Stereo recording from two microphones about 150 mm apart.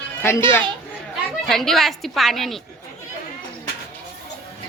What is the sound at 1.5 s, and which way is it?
A woman's voice, centre (ahead or behind).